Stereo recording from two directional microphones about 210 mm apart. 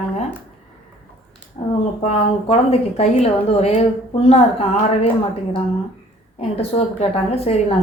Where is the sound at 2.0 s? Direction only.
30° left (ahead or behind).